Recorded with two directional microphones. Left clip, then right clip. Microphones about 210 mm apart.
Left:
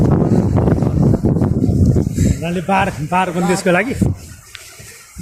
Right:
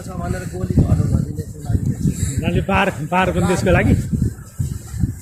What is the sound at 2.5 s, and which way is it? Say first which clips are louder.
Speech: left 1 dB; 55° left (ahead or behind).